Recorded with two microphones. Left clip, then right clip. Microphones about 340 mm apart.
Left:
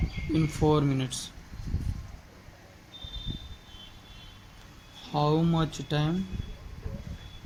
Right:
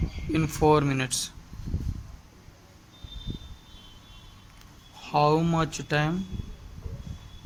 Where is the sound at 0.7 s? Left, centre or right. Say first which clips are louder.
Right 5 dB; right.